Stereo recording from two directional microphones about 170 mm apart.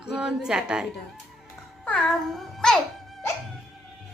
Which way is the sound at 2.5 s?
5° left (ahead or behind).